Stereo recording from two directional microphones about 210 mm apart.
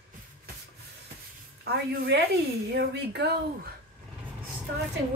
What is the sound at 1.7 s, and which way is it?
Speech, 50° right (ahead or behind).